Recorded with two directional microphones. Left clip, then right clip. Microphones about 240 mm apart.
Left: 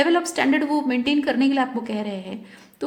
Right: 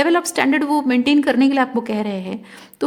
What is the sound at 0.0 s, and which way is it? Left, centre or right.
A woman's voice, right.